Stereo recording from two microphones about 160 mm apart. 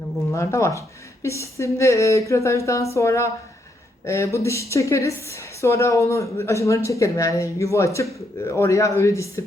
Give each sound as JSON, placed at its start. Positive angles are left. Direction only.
{"t": 0.3, "sound": "a woman's voice", "side_deg": 20}